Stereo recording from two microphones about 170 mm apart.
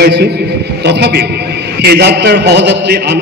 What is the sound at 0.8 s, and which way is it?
A man's voice, 80° right.